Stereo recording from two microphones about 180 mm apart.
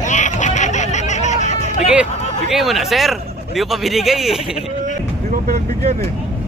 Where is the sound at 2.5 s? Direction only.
Centre (ahead or behind).